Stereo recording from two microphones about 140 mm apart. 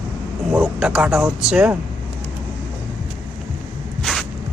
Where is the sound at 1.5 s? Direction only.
5° right (ahead or behind).